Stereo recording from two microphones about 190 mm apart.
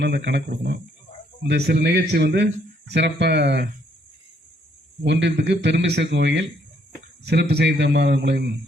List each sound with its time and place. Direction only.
0.0 s a man's voice: 65° right (ahead or behind)
5.0 s a man's voice: 70° right (ahead or behind)